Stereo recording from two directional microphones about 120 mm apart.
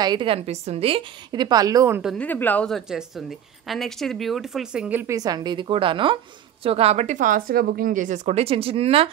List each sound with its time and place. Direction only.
0.0 s a woman's voice: 40° right (ahead or behind)
0.5 s speech: 60° right (ahead or behind)
1.3 s a woman's voice: 35° right (ahead or behind)
2.1 s speech: 15° left (ahead or behind)
2.7 s a woman's voice: 5° right (ahead or behind)
5.0 s a woman's voice: 30° right (ahead or behind)
6.6 s speech: 55° right (ahead or behind)